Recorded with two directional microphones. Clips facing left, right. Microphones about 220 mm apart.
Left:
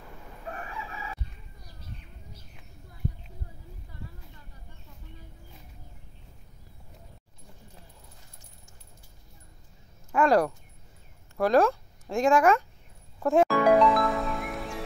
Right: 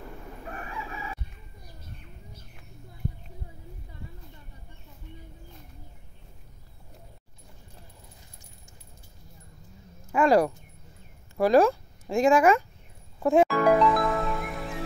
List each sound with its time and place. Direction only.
10.1 s speech: 5° right (ahead or behind)
13.2 s music: centre (ahead or behind)